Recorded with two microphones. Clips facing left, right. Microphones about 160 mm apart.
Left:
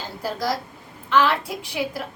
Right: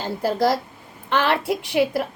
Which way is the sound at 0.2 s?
60° right (ahead or behind).